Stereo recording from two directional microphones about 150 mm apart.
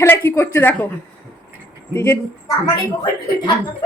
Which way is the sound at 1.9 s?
15° left (ahead or behind).